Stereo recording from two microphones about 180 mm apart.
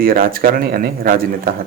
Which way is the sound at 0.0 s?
55° right (ahead or behind).